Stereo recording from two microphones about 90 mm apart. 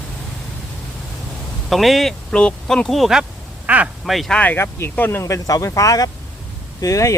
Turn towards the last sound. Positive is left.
turn(degrees=40)  # may be behind; listen again after turning